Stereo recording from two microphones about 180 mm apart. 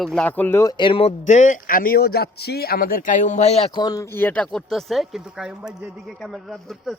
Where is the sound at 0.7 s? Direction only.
25° left (ahead or behind).